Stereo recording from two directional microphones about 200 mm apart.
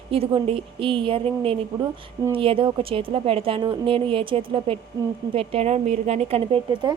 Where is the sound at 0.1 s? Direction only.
30° right (ahead or behind).